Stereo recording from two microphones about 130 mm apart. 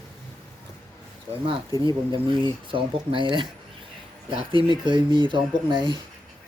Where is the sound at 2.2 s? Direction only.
40° right (ahead or behind).